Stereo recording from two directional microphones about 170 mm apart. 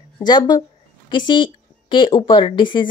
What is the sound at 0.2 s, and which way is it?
Speech, 25° left (ahead or behind).